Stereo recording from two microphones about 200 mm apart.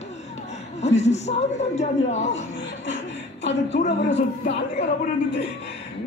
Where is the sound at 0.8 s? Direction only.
35° left (ahead or behind).